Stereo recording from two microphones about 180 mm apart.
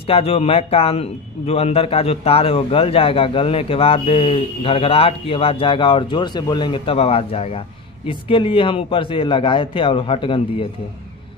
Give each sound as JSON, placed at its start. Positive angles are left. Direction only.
{"t": 0.0, "sound": "a man's voice", "side_deg": 30}